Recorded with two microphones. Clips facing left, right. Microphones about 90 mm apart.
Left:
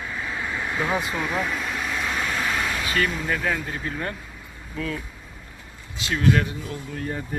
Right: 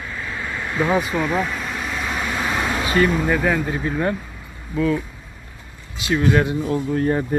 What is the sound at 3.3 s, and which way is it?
Speech, 15° right (ahead or behind).